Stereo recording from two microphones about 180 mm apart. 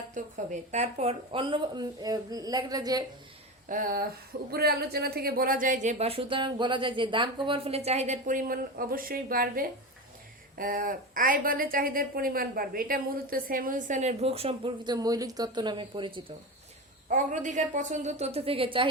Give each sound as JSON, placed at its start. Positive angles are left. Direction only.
{"t": 0.1, "sound": "speech", "side_deg": -40}
{"t": 3.7, "sound": "a woman's voice", "side_deg": -50}
{"t": 4.5, "sound": "a woman's voice", "side_deg": -60}
{"t": 17.1, "sound": "a woman's voice", "side_deg": -45}